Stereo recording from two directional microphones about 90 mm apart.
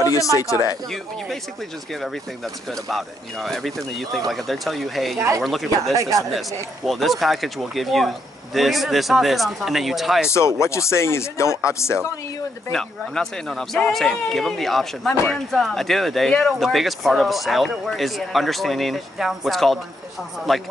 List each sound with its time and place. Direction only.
0.0 s speech: 40° left (ahead or behind)
2.7 s speech: centre (ahead or behind)
5.9 s speech: 40° right (ahead or behind)
6.9 s speech: centre (ahead or behind)
10.3 s speech: 30° left (ahead or behind)
12.7 s speech: 5° left (ahead or behind)